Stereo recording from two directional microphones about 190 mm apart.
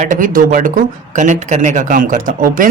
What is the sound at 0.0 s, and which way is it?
Speech, 45° right (ahead or behind).